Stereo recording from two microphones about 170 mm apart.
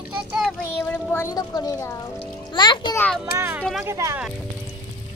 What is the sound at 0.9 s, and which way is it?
A child's voice, 15° left (ahead or behind).